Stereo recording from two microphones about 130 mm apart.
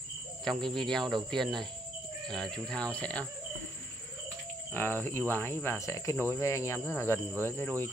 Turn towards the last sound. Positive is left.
turn(degrees=15)  # may be behind; listen again after turning